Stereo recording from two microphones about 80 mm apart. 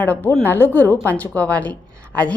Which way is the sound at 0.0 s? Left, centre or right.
Left.